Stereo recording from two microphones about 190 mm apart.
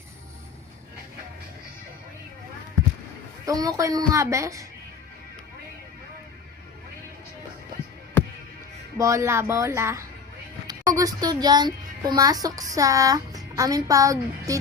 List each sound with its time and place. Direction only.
3.4 s a woman's voice: 20° right (ahead or behind)
9.0 s a woman's voice: 15° right (ahead or behind)